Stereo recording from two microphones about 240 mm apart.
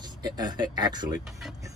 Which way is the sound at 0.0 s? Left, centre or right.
Centre.